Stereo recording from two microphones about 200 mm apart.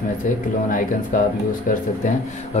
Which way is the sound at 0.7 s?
40° left (ahead or behind).